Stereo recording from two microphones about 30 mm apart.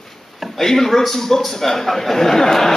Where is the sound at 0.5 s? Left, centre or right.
Centre.